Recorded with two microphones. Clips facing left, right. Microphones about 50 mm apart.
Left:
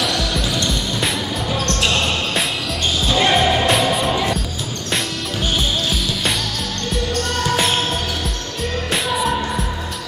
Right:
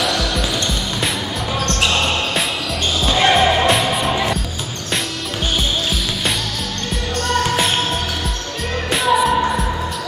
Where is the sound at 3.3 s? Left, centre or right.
Centre.